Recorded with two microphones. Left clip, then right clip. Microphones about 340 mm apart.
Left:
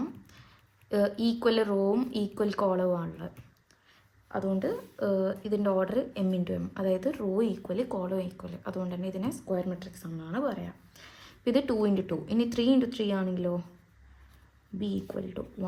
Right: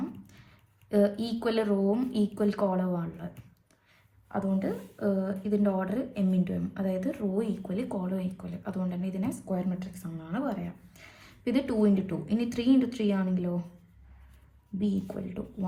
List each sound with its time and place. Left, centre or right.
0.9 s speech: left
4.3 s speech: left
14.8 s speech: left